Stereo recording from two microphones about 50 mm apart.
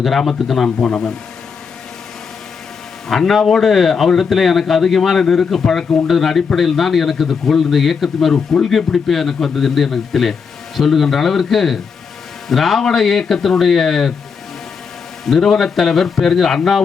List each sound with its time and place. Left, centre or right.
0.0 s a man's voice: centre
0.8 s speech: centre
3.1 s a man's voice: centre
15.2 s a man's voice: centre